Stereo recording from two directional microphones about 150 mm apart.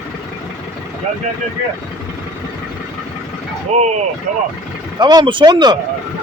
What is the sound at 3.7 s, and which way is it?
Speech, 50° right (ahead or behind).